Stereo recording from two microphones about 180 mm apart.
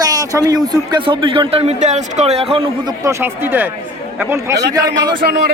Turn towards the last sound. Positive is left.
turn(degrees=-20)  # may be behind; listen again after turning